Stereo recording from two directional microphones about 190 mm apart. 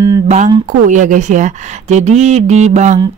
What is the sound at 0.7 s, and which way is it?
Speech, 40° right (ahead or behind).